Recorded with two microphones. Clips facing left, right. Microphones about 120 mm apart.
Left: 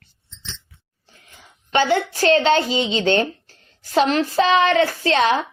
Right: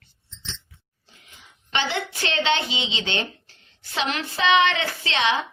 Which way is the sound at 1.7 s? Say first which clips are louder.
Left 9 dB; 45° left (ahead or behind).